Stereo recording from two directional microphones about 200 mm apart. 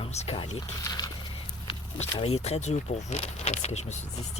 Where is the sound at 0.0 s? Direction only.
30° left (ahead or behind).